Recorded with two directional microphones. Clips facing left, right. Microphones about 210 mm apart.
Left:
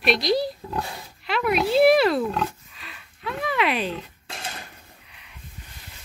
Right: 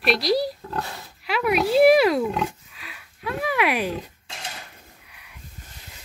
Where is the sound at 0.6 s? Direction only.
15° left (ahead or behind).